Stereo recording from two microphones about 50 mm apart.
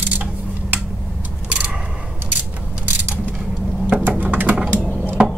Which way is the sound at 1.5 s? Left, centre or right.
Right.